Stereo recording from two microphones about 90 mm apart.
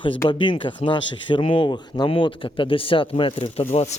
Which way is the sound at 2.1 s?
75° left (ahead or behind).